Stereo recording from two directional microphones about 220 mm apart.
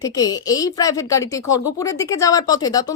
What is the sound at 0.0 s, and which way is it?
Speech, 15° left (ahead or behind).